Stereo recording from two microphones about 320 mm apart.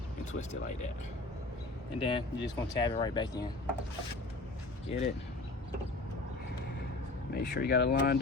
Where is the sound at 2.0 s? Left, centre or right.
Centre.